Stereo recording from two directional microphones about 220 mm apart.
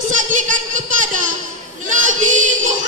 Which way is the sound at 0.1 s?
35° right (ahead or behind).